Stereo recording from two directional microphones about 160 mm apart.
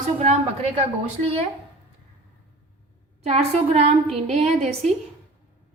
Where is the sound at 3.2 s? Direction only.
45° right (ahead or behind).